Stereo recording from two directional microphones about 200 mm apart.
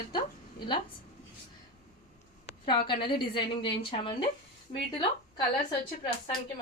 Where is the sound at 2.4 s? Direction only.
25° left (ahead or behind).